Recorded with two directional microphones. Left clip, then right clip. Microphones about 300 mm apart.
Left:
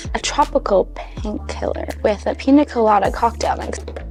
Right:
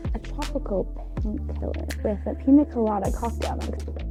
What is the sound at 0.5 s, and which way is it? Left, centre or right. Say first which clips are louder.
A woman's voice: left 12 dB; centre.